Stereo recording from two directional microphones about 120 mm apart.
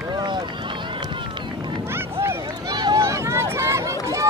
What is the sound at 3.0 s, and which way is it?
Run, 25° right (ahead or behind).